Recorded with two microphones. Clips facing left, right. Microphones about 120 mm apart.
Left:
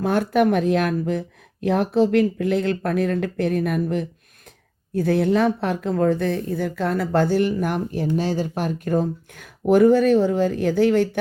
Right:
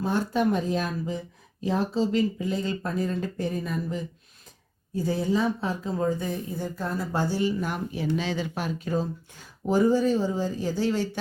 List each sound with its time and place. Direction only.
0.0 s speech: 70° left (ahead or behind)